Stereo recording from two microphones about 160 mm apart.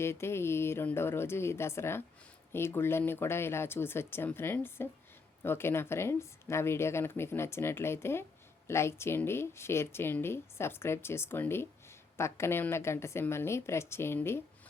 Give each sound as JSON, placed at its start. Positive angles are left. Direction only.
{"t": 0.0, "sound": "speech", "side_deg": 15}